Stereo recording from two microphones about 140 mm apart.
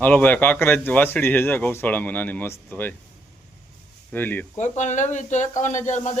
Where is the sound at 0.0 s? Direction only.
10° left (ahead or behind).